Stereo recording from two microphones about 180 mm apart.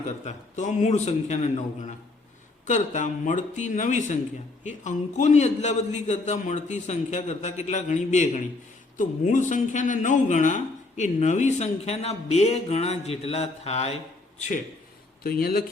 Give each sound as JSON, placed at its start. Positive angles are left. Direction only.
{"t": 0.3, "sound": "a man's voice", "side_deg": 40}
{"t": 2.6, "sound": "a man's voice", "side_deg": 45}
{"t": 15.2, "sound": "speech", "side_deg": 55}